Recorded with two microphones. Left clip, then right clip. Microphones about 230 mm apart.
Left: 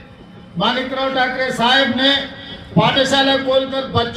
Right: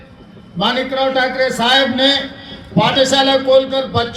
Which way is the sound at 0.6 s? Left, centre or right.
Right.